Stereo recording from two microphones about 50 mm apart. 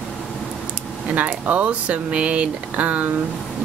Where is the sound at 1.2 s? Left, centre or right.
Right.